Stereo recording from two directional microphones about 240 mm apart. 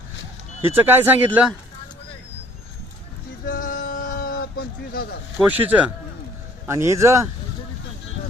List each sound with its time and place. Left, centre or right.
0.6 s speech: centre
3.4 s a sound: left
5.4 s speech: centre